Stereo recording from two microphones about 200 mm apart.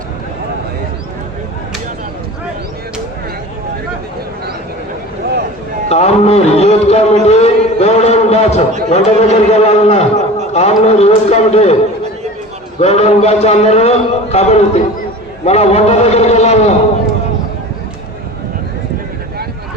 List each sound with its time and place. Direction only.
5.9 s a man's voice: 30° left (ahead or behind)
12.8 s a man's voice: 30° left (ahead or behind)